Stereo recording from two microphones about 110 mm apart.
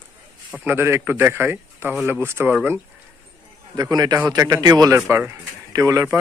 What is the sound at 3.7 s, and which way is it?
A man's voice, 35° right (ahead or behind).